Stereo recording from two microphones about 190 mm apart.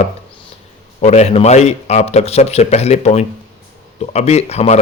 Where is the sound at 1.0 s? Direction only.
35° left (ahead or behind).